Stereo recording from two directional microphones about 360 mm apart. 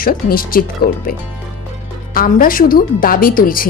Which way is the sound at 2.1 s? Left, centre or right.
Left.